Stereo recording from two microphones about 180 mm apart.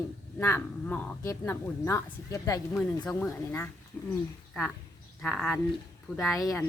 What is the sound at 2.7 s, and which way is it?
Speech, 5° left (ahead or behind).